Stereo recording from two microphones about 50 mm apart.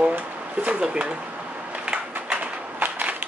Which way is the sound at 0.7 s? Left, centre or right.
Right.